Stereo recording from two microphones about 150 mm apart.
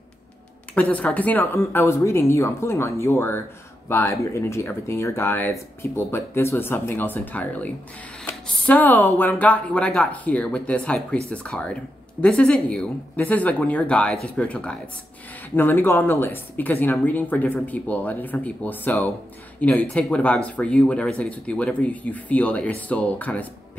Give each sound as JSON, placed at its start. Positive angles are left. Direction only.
{"t": 0.7, "sound": "speech", "side_deg": 10}